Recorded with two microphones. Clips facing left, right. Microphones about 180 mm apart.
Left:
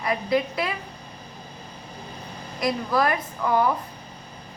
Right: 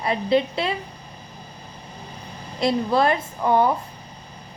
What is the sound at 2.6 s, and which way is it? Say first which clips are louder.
A woman's voice: right 3 dB; 25° right (ahead or behind).